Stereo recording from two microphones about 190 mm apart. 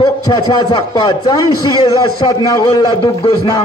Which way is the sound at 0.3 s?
25° left (ahead or behind).